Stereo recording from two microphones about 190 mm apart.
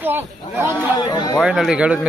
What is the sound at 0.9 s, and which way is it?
Speech, 20° left (ahead or behind).